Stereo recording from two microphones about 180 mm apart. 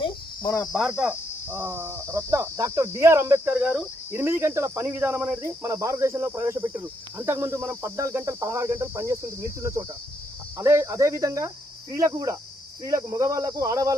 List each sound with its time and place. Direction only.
0.7 s cricket: 5° right (ahead or behind)
12.8 s speech: 20° right (ahead or behind)